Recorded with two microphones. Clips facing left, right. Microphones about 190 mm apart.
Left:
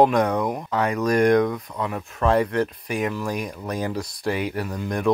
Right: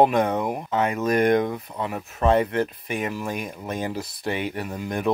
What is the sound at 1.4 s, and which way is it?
Speech, 30° right (ahead or behind).